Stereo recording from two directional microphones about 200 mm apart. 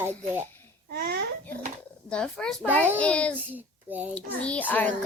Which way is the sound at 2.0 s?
5° left (ahead or behind).